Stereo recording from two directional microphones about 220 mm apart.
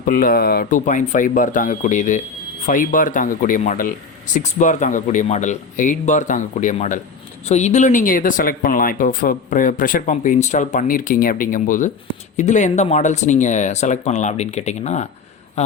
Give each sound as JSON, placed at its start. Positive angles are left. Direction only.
{"t": 0.0, "sound": "speech", "side_deg": 40}